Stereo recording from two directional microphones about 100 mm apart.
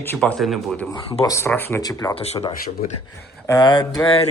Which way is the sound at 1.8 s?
40° left (ahead or behind).